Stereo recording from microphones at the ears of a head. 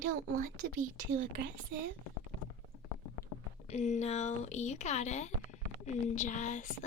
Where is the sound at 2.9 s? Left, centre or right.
Left.